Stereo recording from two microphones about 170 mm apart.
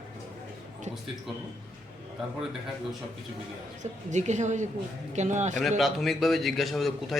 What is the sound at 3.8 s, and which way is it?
Speech, 45° right (ahead or behind).